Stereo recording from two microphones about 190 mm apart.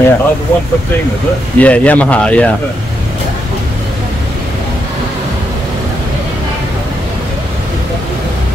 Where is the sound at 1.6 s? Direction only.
5° left (ahead or behind).